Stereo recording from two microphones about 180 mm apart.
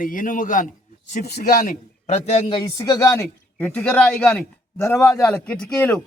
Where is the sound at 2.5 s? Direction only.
25° left (ahead or behind).